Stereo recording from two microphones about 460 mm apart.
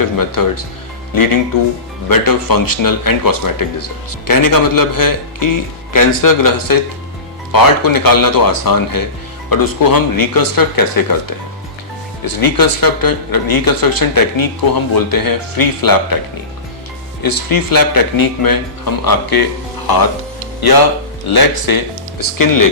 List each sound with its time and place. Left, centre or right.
0.2 s speech: left
17.2 s speech: left
21.2 s speech: left